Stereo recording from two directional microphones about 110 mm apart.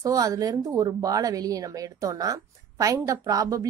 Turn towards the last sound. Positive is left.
turn(degrees=-30)  # may be behind; listen again after turning